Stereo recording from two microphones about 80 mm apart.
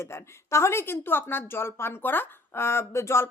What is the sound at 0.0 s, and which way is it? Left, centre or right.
A woman's voice, left.